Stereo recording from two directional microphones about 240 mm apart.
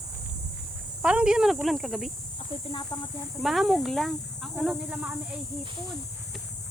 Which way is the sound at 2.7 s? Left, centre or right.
Centre.